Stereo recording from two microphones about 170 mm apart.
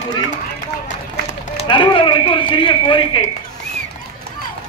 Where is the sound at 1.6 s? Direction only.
30° left (ahead or behind).